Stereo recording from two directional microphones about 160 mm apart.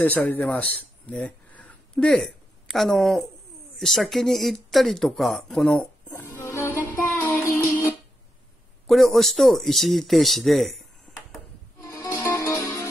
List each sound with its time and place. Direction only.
0.0 s speech: 10° left (ahead or behind)
3.7 s a sound: centre (ahead or behind)
8.8 s speech: centre (ahead or behind)
11.8 s music: 20° left (ahead or behind)